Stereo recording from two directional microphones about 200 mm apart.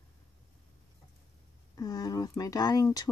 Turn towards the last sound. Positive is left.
turn(degrees=20)  # may be behind; listen again after turning